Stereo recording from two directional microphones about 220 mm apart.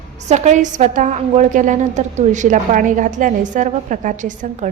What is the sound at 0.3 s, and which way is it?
A woman's voice, 30° right (ahead or behind).